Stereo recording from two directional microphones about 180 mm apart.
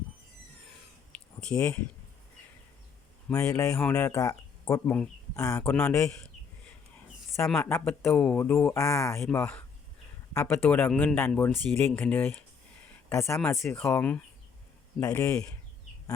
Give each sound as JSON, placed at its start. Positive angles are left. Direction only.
{"t": 1.1, "sound": "a sound", "side_deg": 5}
{"t": 3.2, "sound": "speech", "side_deg": 15}
{"t": 5.7, "sound": "speech", "side_deg": 5}
{"t": 7.5, "sound": "speech", "side_deg": 10}